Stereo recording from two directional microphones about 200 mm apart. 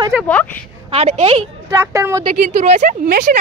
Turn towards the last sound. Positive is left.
turn(degrees=-45)  # may be behind; listen again after turning